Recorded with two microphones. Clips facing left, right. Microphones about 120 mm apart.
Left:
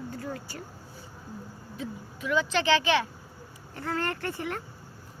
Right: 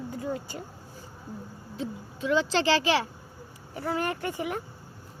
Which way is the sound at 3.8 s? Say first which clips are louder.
Right 2 dB; 15° right (ahead or behind).